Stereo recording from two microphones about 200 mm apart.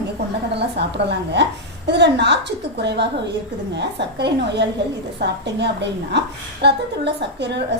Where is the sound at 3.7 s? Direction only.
60° right (ahead or behind).